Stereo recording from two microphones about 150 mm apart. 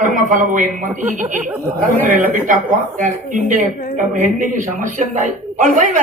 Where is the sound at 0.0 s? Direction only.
60° right (ahead or behind).